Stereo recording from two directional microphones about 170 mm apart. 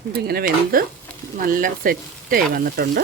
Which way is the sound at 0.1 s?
65° right (ahead or behind).